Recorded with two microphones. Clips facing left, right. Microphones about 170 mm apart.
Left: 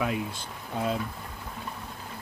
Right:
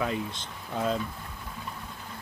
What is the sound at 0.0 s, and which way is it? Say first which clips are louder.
Speech: left 1 dB; 10° left (ahead or behind).